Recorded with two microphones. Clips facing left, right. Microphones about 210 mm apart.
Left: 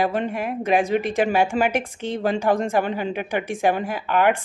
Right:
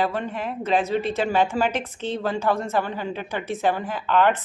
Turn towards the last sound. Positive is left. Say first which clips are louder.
# left 1 dB
turn(degrees=10)  # may be behind; listen again after turning